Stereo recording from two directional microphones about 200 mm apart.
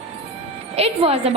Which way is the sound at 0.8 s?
30° right (ahead or behind).